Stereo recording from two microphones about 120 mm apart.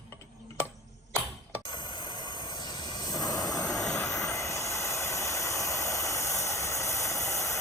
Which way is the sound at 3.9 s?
25° left (ahead or behind).